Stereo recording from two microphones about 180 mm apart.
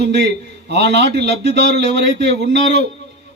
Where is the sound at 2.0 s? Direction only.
40° left (ahead or behind).